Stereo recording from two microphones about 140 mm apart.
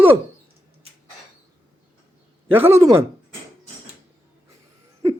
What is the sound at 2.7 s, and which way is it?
Speech, 20° right (ahead or behind).